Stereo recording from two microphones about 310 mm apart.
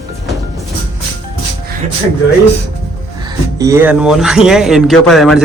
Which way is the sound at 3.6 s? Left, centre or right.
Centre.